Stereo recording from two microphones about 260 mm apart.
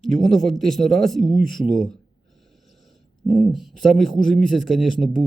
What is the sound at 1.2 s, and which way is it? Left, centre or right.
Speech, right.